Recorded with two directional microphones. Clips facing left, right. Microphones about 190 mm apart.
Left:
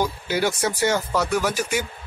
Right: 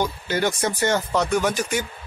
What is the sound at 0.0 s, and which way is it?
Speech, 10° left (ahead or behind).